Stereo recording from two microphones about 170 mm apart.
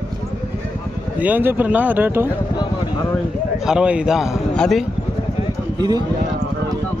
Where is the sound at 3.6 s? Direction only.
5° right (ahead or behind).